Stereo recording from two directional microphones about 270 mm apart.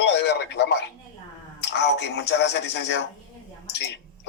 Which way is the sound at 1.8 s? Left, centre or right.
Left.